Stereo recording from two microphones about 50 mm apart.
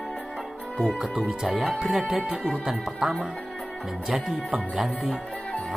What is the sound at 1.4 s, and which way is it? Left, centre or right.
Music, centre.